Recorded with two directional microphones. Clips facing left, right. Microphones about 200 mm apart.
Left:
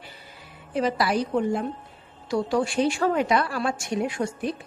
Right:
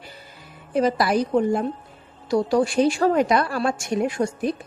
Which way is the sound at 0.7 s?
45° right (ahead or behind).